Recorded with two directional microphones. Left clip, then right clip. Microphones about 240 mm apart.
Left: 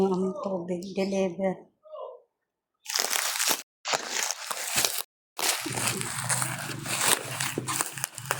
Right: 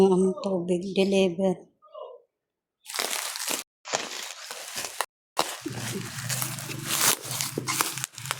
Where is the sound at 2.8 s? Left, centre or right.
Centre.